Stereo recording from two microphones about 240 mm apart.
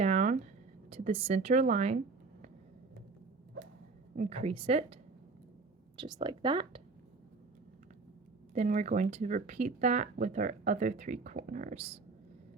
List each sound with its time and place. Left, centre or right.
0.0 s a sound: right
0.9 s a woman's voice: right
4.1 s a woman's voice: right
6.0 s a woman's voice: centre
8.5 s speech: right